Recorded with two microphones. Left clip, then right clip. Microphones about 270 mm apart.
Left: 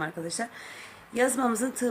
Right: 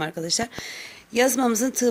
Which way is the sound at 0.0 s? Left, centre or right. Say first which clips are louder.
Right 6 dB; right.